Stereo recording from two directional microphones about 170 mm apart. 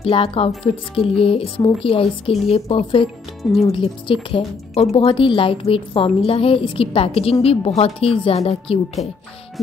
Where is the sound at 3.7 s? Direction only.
30° left (ahead or behind).